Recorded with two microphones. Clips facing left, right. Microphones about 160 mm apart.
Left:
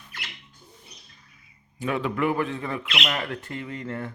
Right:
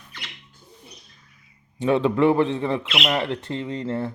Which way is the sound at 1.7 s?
30° right (ahead or behind).